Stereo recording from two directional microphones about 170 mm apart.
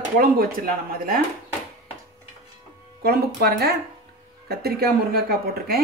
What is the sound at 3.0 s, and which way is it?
A woman's voice, 65° right (ahead or behind).